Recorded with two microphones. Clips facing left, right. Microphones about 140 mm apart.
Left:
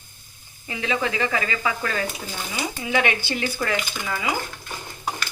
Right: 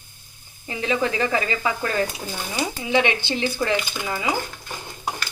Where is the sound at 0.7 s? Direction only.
35° right (ahead or behind).